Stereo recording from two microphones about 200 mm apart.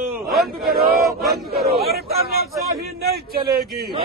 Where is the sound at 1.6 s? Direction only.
50° right (ahead or behind).